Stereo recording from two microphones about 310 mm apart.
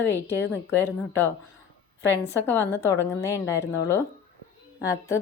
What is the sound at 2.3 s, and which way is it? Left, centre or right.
A woman's voice, centre.